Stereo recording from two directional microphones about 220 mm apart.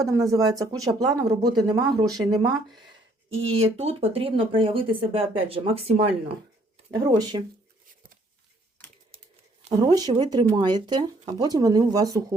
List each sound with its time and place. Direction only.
0.1 s speech: 15° right (ahead or behind)
3.5 s speech: 30° right (ahead or behind)
9.1 s crumpling: 30° right (ahead or behind)
9.8 s speech: 15° right (ahead or behind)